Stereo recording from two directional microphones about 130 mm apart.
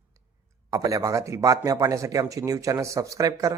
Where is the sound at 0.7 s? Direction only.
30° right (ahead or behind).